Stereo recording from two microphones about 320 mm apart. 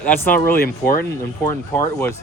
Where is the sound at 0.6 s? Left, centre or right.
Left.